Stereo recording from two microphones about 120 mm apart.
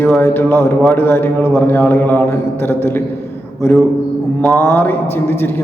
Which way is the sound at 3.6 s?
20° left (ahead or behind).